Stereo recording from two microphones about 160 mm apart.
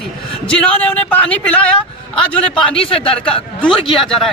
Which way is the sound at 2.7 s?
35° left (ahead or behind).